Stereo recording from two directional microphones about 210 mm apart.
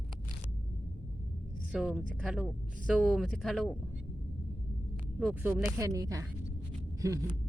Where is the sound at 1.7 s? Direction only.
5° right (ahead or behind).